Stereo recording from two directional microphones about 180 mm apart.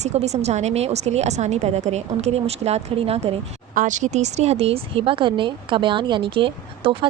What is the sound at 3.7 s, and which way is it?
A woman's voice, 45° right (ahead or behind).